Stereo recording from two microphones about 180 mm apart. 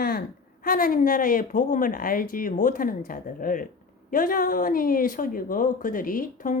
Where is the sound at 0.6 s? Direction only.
55° left (ahead or behind).